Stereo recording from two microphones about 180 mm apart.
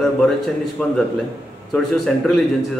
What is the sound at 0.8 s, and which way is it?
A man's voice, 5° left (ahead or behind).